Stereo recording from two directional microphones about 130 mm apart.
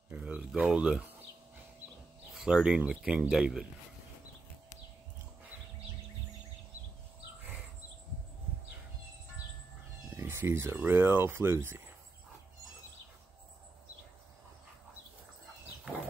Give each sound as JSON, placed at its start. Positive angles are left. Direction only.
{"t": 0.1, "sound": "speech", "side_deg": -10}
{"t": 2.3, "sound": "speech", "side_deg": -5}
{"t": 10.1, "sound": "speech", "side_deg": -20}